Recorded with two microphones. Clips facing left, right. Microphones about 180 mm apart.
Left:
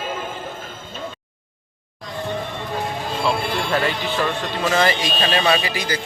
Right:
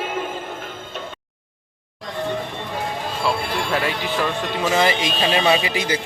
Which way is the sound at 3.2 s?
5° right (ahead or behind).